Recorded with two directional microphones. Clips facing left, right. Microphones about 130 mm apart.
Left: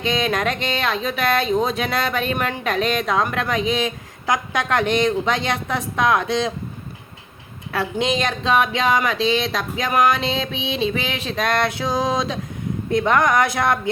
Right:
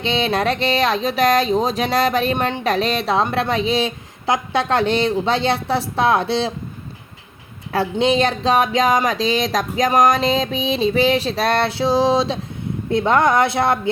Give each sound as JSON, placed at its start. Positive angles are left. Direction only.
{"t": 0.0, "sound": "speech", "side_deg": -30}
{"t": 7.7, "sound": "speech", "side_deg": -35}